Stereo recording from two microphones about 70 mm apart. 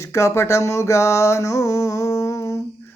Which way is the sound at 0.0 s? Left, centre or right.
Left.